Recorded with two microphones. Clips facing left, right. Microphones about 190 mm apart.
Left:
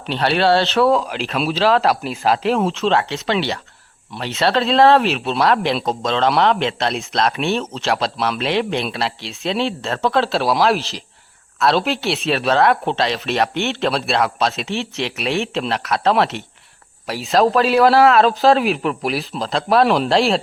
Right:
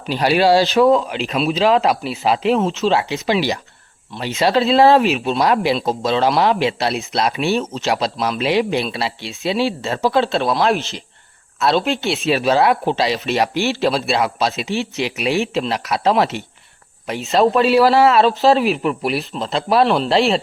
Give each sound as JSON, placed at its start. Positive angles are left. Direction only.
{"t": 0.0, "sound": "speech", "side_deg": -5}